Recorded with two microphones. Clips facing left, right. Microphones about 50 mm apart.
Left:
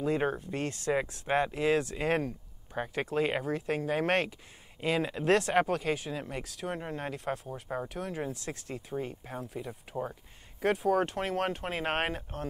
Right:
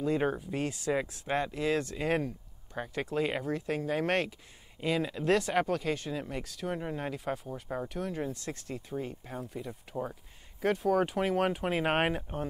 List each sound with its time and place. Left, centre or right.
0.0 s speech: centre
0.6 s speech: centre
1.2 s speech: centre
2.7 s speech: left
5.3 s speech: centre